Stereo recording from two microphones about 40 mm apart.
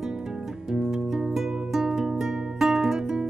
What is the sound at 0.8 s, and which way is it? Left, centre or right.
Music, centre.